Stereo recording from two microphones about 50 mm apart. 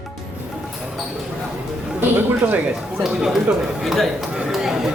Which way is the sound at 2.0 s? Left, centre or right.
Right.